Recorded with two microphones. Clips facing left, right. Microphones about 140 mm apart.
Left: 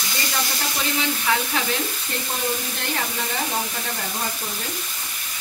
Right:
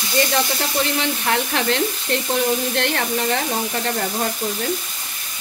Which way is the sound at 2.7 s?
75° right (ahead or behind).